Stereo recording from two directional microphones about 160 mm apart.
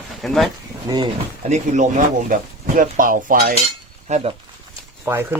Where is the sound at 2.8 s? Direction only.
55° right (ahead or behind).